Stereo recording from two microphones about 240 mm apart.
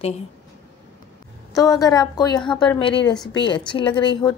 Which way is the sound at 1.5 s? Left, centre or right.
Centre.